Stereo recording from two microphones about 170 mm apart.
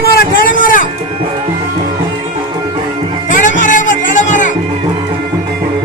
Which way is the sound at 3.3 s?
50° left (ahead or behind).